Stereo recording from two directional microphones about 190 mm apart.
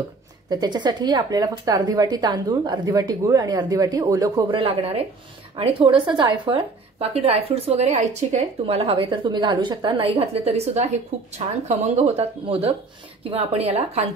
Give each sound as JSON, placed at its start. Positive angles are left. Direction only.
{"t": 0.5, "sound": "a woman's voice", "side_deg": -20}